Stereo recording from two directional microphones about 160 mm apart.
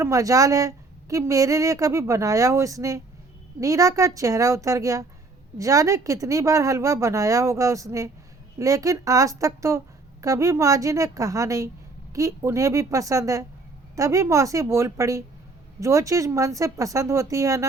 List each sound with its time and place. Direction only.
0.0 s a woman's voice: 20° right (ahead or behind)